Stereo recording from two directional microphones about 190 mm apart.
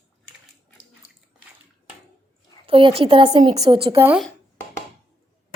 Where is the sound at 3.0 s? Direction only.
30° right (ahead or behind).